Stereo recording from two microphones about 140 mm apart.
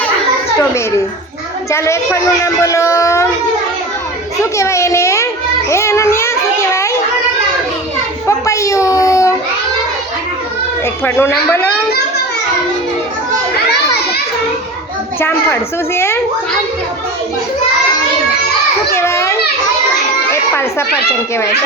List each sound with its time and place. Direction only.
1.7 s speech: 20° left (ahead or behind)
4.5 s a child's voice: 20° left (ahead or behind)
8.3 s a child's voice: 20° left (ahead or behind)
11.0 s a woman's voice: 15° left (ahead or behind)
15.2 s a woman's voice: 15° left (ahead or behind)
18.9 s a sound: 20° left (ahead or behind)
20.3 s a woman's voice: 20° left (ahead or behind)